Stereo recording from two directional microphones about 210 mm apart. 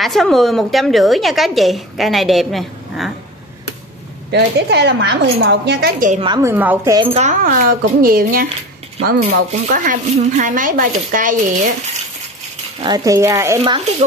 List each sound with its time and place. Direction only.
0.0 s a woman's voice: centre (ahead or behind)
4.3 s a woman's voice: 50° right (ahead or behind)
6.2 s a woman's voice: 20° right (ahead or behind)
6.5 s speech: 10° right (ahead or behind)
7.2 s a woman's voice: 40° right (ahead or behind)
9.5 s speech: 35° right (ahead or behind)
12.8 s speech: 15° right (ahead or behind)